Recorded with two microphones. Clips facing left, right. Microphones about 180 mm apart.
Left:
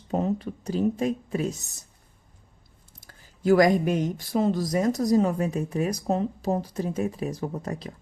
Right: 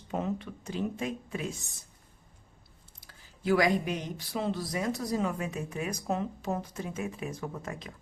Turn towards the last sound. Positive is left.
turn(degrees=35)  # may be behind; listen again after turning